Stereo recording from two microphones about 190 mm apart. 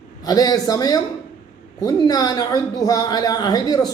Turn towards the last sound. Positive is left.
turn(degrees=20)  # may be behind; listen again after turning